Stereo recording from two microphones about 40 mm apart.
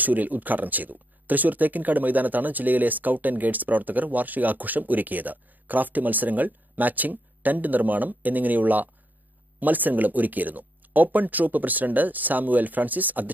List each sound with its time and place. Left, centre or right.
0.0 s speech: right